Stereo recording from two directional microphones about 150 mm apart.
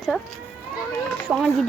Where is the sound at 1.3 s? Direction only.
10° right (ahead or behind).